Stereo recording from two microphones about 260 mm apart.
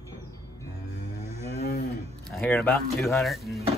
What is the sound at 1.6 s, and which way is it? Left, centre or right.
Cattle, left.